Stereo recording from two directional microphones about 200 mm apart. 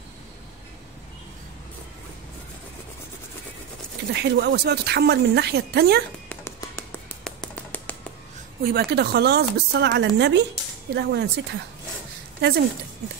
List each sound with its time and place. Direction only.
4.1 s a woman's voice: 55° right (ahead or behind)
7.2 s tap: 10° left (ahead or behind)
8.6 s a woman's voice: 55° right (ahead or behind)